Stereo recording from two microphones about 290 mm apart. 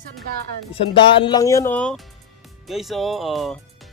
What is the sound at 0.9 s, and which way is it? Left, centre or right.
A woman's voice, centre.